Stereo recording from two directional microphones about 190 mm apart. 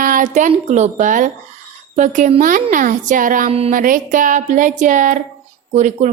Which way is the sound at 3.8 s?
45° right (ahead or behind).